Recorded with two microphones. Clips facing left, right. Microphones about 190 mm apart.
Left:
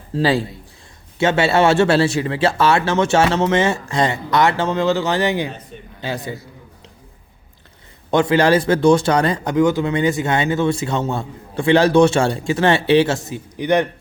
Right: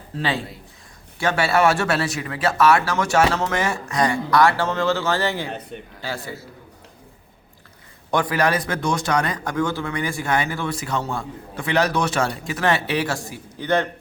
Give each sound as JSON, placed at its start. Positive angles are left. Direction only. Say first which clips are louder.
{"t": 0.2, "sound": "a man's voice", "louder": "left 8 dB", "side_deg": 35}
{"t": 1.2, "sound": "speech", "louder": "left 4 dB", "side_deg": 25}
{"t": 8.1, "sound": "speech", "louder": "left 6 dB", "side_deg": 25}